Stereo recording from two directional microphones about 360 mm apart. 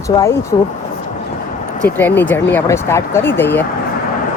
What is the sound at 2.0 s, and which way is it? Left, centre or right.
Speech, centre.